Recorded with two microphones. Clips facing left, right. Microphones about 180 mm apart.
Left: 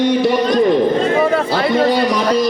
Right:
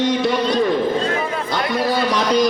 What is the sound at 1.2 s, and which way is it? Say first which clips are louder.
Speech: left 9 dB; 75° left (ahead or behind).